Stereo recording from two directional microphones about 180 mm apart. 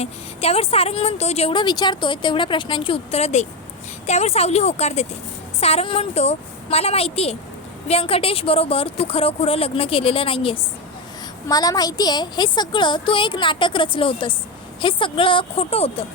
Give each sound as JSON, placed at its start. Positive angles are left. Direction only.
{"t": 0.0, "sound": "a woman's voice", "side_deg": 35}